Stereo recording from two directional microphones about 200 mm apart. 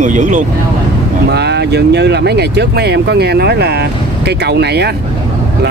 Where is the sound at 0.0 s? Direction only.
40° right (ahead or behind).